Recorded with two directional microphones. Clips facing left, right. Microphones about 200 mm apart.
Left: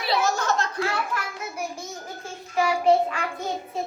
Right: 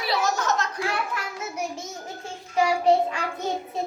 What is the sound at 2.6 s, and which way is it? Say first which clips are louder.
Child singing: even; 25° right (ahead or behind).